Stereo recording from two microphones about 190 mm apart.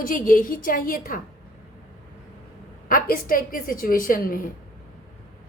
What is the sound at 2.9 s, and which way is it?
A woman's voice, 50° left (ahead or behind).